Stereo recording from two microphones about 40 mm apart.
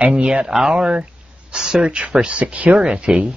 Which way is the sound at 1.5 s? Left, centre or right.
Right.